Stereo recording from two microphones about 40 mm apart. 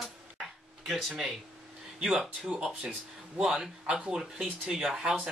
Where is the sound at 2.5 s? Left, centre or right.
Centre.